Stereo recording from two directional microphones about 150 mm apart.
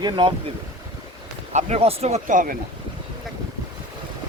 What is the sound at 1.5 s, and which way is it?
Speech, 45° right (ahead or behind).